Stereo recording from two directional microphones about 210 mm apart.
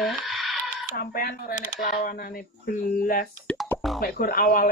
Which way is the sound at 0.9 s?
45° left (ahead or behind).